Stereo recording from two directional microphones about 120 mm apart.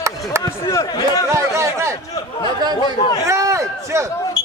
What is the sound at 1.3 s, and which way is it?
Speech, 25° right (ahead or behind).